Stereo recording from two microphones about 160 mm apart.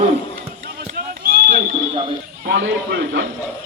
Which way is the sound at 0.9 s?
65° right (ahead or behind).